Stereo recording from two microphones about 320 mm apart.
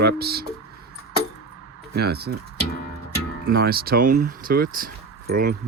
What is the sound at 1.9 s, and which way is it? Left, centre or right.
Speech, right.